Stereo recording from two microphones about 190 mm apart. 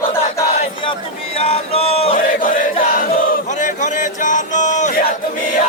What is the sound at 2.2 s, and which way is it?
Chant, 45° left (ahead or behind).